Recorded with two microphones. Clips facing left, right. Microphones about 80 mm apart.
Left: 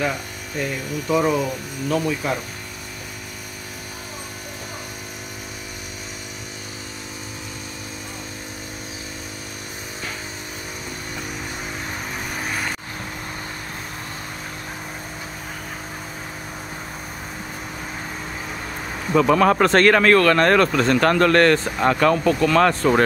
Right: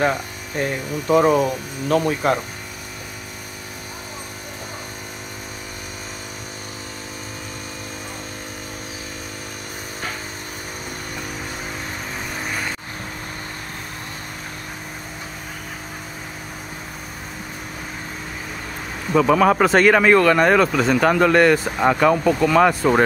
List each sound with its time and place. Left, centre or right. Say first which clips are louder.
0.0 s speech: right 4 dB; right
19.1 s speech: right 1 dB; centre